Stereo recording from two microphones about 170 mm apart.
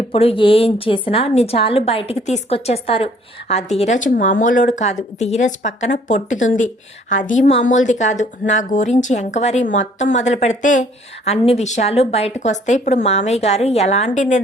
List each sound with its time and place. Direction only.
0.1 s a woman's voice: 35° left (ahead or behind)
3.8 s a woman's voice: 45° left (ahead or behind)